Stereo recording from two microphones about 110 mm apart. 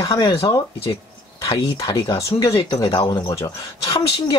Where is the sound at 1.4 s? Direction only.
40° left (ahead or behind).